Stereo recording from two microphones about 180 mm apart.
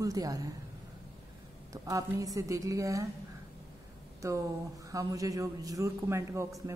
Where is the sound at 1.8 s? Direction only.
20° right (ahead or behind).